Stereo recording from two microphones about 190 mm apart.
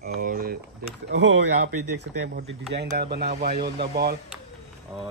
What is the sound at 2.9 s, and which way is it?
Speech, 55° right (ahead or behind).